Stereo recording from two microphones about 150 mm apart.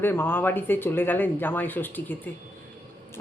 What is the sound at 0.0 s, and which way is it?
Speech, 15° left (ahead or behind).